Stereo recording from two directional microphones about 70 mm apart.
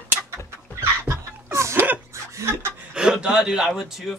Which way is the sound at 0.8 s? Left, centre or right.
Right.